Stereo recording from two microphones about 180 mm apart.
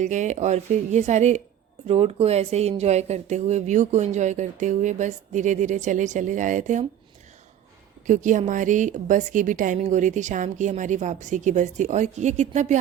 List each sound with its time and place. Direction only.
0.0 s speech: 40° right (ahead or behind)
8.0 s a woman's voice: 45° right (ahead or behind)